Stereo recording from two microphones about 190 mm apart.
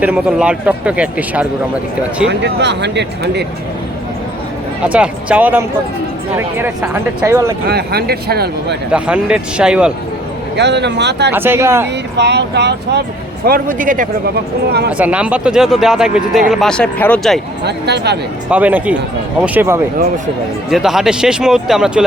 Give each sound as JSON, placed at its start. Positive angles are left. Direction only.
{"t": 0.0, "sound": "speech", "side_deg": -5}
{"t": 2.2, "sound": "speech", "side_deg": -65}
{"t": 4.9, "sound": "speech", "side_deg": -5}
{"t": 7.6, "sound": "speech", "side_deg": -55}
{"t": 8.9, "sound": "speech", "side_deg": -5}
{"t": 10.6, "sound": "speech", "side_deg": -65}
{"t": 11.3, "sound": "speech", "side_deg": -10}
{"t": 12.1, "sound": "speech", "side_deg": -65}
{"t": 13.4, "sound": "speech", "side_deg": -50}
{"t": 14.9, "sound": "speech", "side_deg": -5}
{"t": 17.6, "sound": "speech", "side_deg": -60}
{"t": 18.5, "sound": "speech", "side_deg": -10}